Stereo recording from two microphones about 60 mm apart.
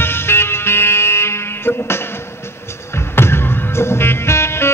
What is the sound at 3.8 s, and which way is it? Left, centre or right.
Music, left.